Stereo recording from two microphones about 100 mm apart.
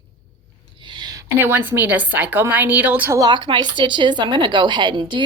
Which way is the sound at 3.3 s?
50° right (ahead or behind).